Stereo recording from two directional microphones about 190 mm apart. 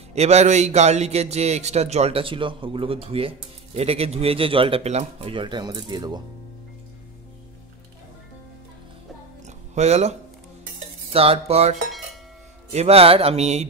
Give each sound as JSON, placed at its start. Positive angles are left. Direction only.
{"t": 0.1, "sound": "speech", "side_deg": -35}
{"t": 9.8, "sound": "speech", "side_deg": -35}
{"t": 11.1, "sound": "speech", "side_deg": -30}
{"t": 12.7, "sound": "speech", "side_deg": -30}